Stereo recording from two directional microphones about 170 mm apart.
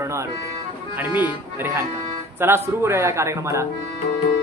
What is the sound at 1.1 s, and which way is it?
A man's voice, 10° right (ahead or behind).